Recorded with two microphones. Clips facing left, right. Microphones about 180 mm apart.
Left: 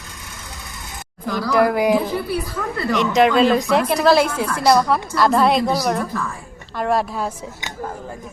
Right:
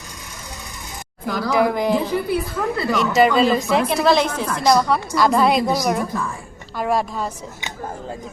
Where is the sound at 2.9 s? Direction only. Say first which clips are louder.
Left 1 dB; 5° right (ahead or behind).